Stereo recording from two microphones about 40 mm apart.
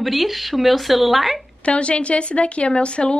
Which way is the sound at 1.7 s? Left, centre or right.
Left.